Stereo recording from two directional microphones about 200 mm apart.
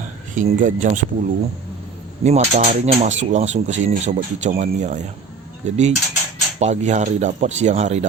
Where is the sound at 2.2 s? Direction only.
35° right (ahead or behind).